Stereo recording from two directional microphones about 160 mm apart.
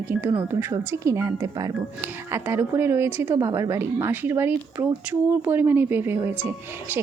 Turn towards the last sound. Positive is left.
turn(degrees=-15)  # may be behind; listen again after turning